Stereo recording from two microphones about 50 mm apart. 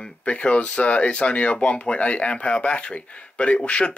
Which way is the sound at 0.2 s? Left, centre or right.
Left.